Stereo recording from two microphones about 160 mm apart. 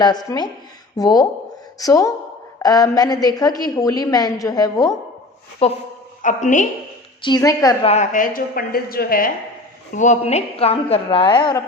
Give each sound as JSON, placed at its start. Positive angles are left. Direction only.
{"t": 0.0, "sound": "a woman's voice", "side_deg": 25}
{"t": 5.6, "sound": "a woman's voice", "side_deg": 40}
{"t": 6.2, "sound": "a woman's voice", "side_deg": 50}
{"t": 7.2, "sound": "a woman's voice", "side_deg": 25}
{"t": 7.9, "sound": "a woman's voice", "side_deg": 50}
{"t": 9.9, "sound": "a woman's voice", "side_deg": 50}